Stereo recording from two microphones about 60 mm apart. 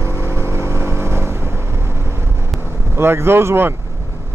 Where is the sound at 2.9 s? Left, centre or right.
Right.